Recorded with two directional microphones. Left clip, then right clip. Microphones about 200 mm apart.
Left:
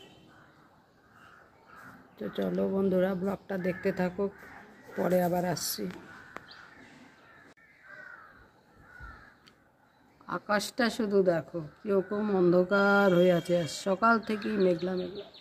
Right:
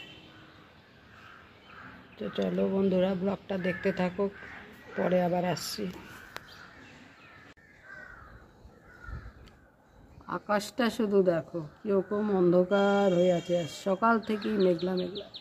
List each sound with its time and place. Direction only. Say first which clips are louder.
2.1 s a woman's voice: right 1 dB; centre (ahead or behind)
10.2 s a woman's voice: even; centre (ahead or behind)
12.9 s speech: left 2 dB; 20° left (ahead or behind)
13.7 s a woman's voice: left 1 dB; centre (ahead or behind)